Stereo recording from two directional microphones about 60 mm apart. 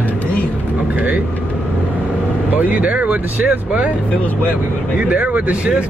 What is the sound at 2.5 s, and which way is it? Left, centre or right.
Speech, right.